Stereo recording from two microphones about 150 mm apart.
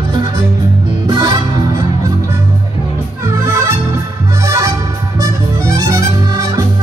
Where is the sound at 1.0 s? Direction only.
30° right (ahead or behind).